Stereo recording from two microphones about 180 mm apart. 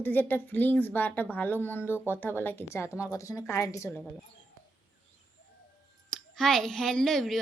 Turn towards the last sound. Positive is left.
turn(degrees=0)  # may be behind; listen again after turning